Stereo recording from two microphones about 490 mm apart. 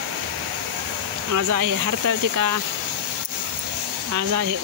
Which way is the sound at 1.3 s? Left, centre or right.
Right.